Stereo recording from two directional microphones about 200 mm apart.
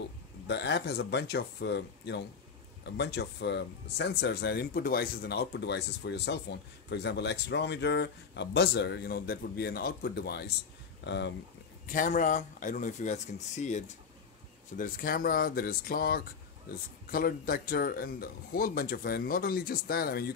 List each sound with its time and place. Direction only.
0.5 s speech: 60° left (ahead or behind)
11.9 s speech: 40° left (ahead or behind)